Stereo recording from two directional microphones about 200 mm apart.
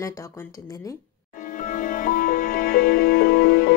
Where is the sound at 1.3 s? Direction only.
40° left (ahead or behind).